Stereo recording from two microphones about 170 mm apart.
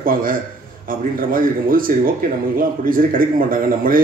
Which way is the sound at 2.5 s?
55° right (ahead or behind).